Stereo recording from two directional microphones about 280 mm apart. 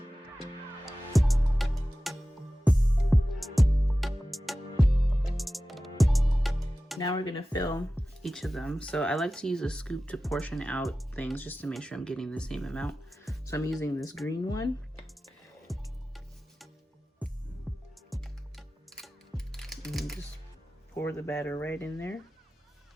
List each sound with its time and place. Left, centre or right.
0.9 s music: centre
7.0 s speech: centre
8.2 s speech: centre
13.4 s music: centre
14.3 s speech: centre
15.6 s music: centre
17.7 s music: centre
20.9 s speech: centre